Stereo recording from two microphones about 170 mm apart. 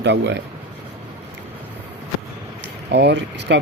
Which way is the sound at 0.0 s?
90° right.